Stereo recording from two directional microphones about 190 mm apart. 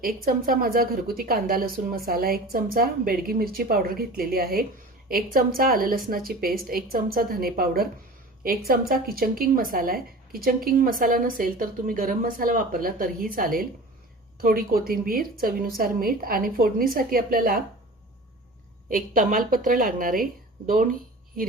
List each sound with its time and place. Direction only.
0.0 s a woman's voice: 50° right (ahead or behind)
18.9 s a woman's voice: 45° right (ahead or behind)